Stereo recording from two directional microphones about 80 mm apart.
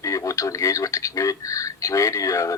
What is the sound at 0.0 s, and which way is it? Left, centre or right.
Speech, left.